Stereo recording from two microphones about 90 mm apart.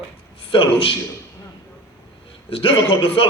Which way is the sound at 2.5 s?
90° left.